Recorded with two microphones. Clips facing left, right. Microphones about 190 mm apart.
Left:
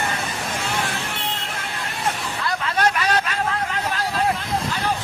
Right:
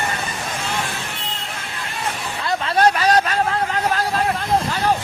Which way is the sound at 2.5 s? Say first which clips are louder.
Right 5 dB; 35° right (ahead or behind).